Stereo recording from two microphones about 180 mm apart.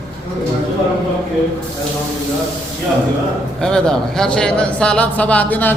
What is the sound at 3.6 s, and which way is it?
A man's voice, 5° left (ahead or behind).